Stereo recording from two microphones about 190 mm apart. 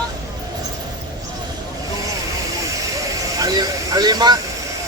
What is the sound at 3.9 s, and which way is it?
Vehicle, 20° right (ahead or behind).